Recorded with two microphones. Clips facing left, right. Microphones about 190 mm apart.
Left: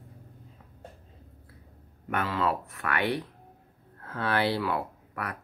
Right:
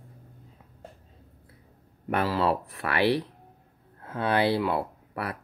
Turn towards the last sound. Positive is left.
turn(degrees=-30)  # may be behind; listen again after turning